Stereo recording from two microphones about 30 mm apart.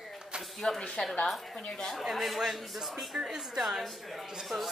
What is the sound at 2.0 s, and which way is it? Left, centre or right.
Speech, centre.